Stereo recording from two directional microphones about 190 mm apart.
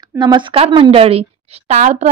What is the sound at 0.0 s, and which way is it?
A woman's voice, 20° right (ahead or behind).